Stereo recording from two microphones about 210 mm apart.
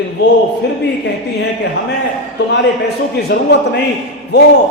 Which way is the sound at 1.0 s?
55° left (ahead or behind).